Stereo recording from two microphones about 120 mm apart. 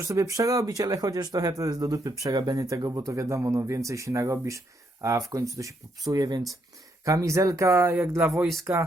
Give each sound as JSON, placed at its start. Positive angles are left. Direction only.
{"t": 0.0, "sound": "speech", "side_deg": -25}